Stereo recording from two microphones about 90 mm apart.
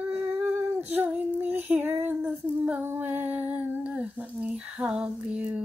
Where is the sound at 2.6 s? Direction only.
25° right (ahead or behind).